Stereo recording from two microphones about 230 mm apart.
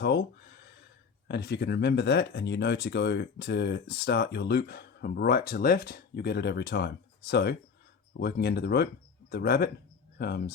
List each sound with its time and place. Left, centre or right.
0.0 s speech: left
1.3 s speech: left